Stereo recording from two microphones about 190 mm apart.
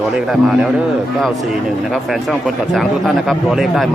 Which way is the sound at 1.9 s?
Centre (ahead or behind).